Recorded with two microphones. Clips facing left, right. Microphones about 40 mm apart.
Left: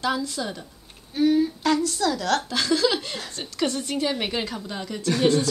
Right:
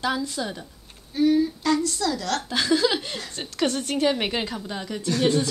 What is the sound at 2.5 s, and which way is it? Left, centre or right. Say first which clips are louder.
Speech: right 5 dB; centre.